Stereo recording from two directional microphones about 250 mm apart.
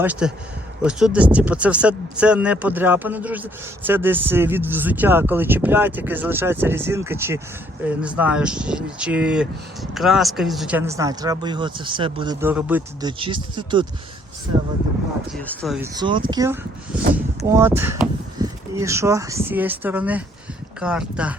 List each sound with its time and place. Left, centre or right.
0.0 s speech: centre
13.1 s speech: centre
15.4 s speech: centre
16.0 s speech: centre